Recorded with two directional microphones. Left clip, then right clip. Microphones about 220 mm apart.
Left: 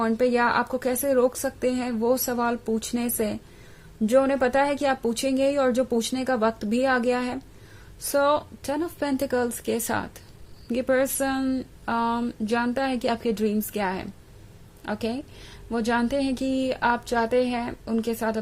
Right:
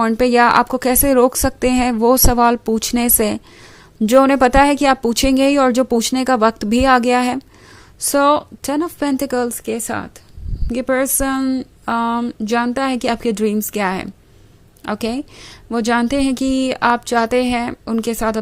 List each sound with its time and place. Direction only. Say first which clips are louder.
0.0 s a woman's voice: right 9 dB; 30° right (ahead or behind)